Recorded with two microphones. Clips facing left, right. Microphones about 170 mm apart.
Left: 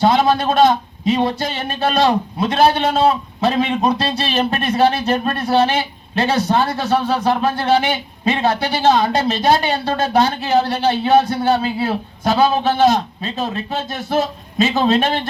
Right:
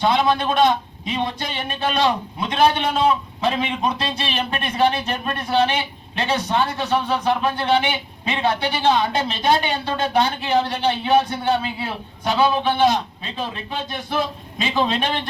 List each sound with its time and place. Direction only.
0.0 s a man's voice: 40° left (ahead or behind)